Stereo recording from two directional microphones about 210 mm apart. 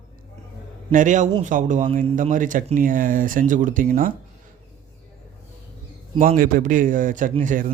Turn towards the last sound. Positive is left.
turn(degrees=-35)  # may be behind; listen again after turning